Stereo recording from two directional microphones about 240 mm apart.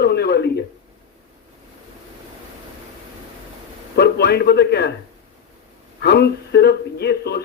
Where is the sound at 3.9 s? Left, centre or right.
Left.